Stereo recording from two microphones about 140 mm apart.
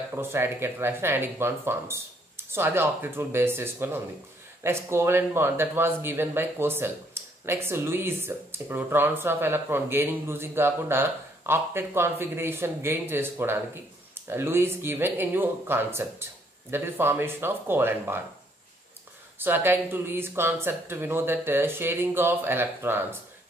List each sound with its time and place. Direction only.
0.1 s speech: 15° right (ahead or behind)
19.3 s speech: 15° right (ahead or behind)